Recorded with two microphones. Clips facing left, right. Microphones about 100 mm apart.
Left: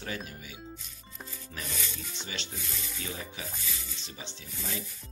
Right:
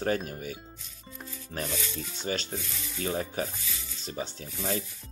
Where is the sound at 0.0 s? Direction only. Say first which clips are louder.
Right 9 dB; 45° right (ahead or behind).